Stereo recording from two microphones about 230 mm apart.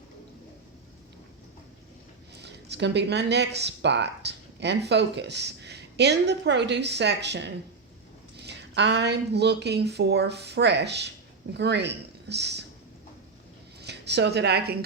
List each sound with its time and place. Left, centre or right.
2.4 s speech: right
13.8 s a woman's voice: right